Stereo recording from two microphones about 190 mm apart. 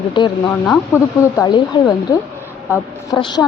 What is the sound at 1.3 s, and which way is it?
A woman's voice, 20° left (ahead or behind).